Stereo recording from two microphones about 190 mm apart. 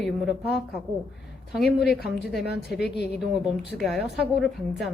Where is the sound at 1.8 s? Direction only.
55° left (ahead or behind).